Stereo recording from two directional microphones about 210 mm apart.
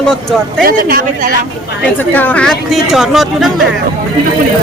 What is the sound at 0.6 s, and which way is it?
Speech, 45° right (ahead or behind).